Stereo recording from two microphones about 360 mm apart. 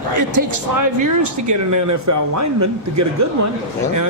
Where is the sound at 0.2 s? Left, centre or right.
Right.